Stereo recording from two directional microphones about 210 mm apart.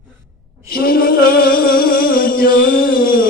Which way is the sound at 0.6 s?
45° left (ahead or behind).